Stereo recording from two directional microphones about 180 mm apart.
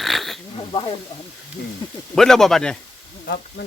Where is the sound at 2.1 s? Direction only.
Centre (ahead or behind).